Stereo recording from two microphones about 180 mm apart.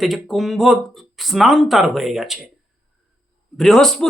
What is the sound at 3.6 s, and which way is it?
Speech, centre (ahead or behind).